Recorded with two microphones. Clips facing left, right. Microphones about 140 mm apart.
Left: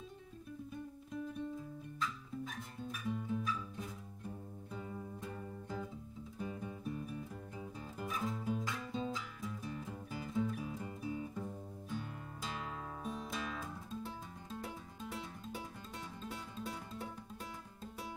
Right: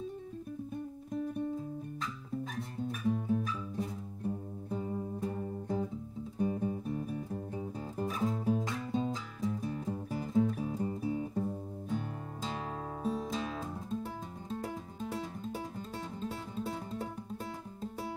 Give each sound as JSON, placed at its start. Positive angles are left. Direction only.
{"t": 2.0, "sound": "music", "side_deg": -40}